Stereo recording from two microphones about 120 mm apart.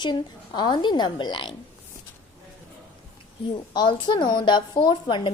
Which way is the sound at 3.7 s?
40° left (ahead or behind).